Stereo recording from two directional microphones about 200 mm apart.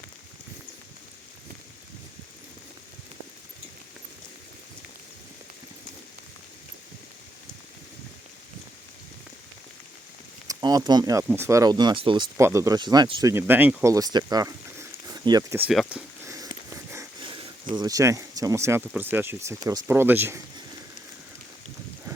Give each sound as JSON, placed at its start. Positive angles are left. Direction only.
{"t": 10.4, "sound": "speech", "side_deg": -20}
{"t": 13.3, "sound": "speech", "side_deg": -10}
{"t": 15.7, "sound": "speech", "side_deg": 0}
{"t": 16.2, "sound": "sniff", "side_deg": -15}
{"t": 16.6, "sound": "a sound", "side_deg": -15}
{"t": 19.6, "sound": "speech", "side_deg": -15}